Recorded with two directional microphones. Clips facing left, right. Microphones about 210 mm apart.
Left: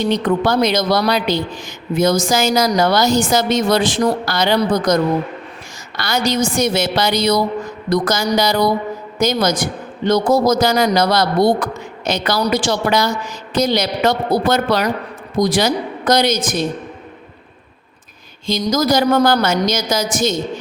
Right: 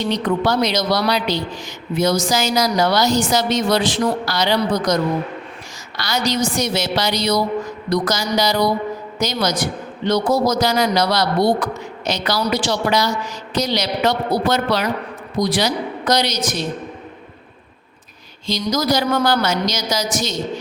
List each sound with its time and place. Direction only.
0.1 s a woman's voice: 50° left (ahead or behind)
6.0 s a woman's voice: 55° left (ahead or behind)
18.4 s a woman's voice: 50° left (ahead or behind)